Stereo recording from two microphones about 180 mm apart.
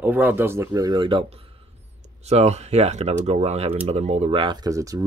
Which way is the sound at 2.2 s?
35° right (ahead or behind).